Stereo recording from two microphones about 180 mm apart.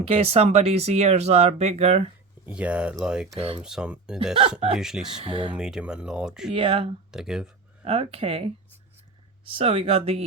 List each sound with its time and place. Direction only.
0.0 s speech: 35° right (ahead or behind)
2.5 s speech: 5° right (ahead or behind)
3.3 s speech: 30° right (ahead or behind)
3.6 s speech: 5° right (ahead or behind)
5.0 s speech: 30° right (ahead or behind)
5.5 s speech: 5° right (ahead or behind)
6.5 s speech: 30° right (ahead or behind)
7.1 s speech: 5° right (ahead or behind)
7.9 s speech: 35° right (ahead or behind)
9.6 s speech: 30° right (ahead or behind)